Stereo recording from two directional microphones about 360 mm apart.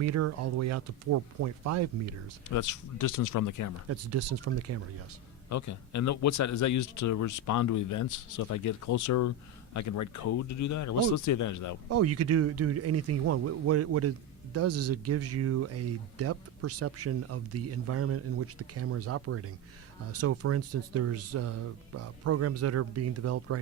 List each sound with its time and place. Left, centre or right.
0.0 s speech: right
2.5 s speech: left
3.8 s speech: right
5.5 s a man's voice: left
11.9 s speech: right